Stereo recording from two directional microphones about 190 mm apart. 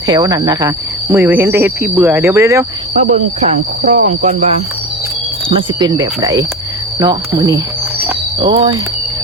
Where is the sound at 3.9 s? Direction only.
40° right (ahead or behind).